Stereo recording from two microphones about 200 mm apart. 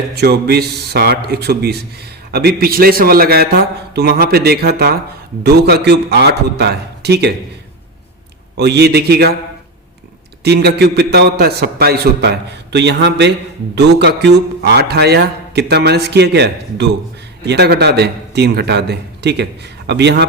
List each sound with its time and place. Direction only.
0.2 s a man's voice: 55° right (ahead or behind)
8.5 s a man's voice: 55° right (ahead or behind)
10.4 s a man's voice: 55° right (ahead or behind)